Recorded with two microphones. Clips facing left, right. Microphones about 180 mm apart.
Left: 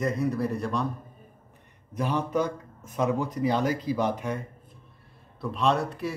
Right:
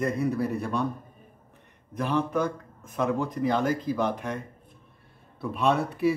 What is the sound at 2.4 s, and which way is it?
Speech, 60° right (ahead or behind).